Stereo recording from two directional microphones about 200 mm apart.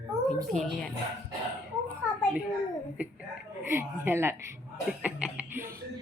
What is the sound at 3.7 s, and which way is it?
Speech, 10° right (ahead or behind).